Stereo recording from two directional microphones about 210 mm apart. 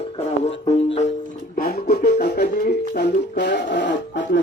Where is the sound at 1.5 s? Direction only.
45° left (ahead or behind).